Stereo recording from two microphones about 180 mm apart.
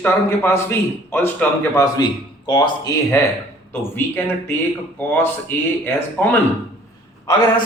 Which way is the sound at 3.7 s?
10° left (ahead or behind).